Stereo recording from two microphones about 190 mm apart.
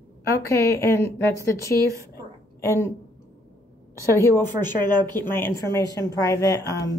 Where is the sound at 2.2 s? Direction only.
15° left (ahead or behind).